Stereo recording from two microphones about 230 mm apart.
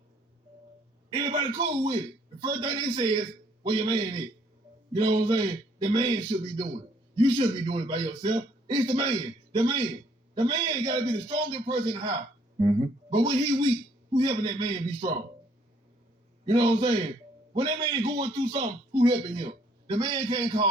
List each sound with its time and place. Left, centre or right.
1.1 s a man's voice: centre
7.2 s a man's voice: right
16.5 s a man's voice: centre